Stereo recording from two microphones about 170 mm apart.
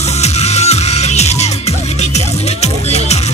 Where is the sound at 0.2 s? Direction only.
40° left (ahead or behind).